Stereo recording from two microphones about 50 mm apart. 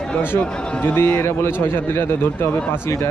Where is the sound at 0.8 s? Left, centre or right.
Left.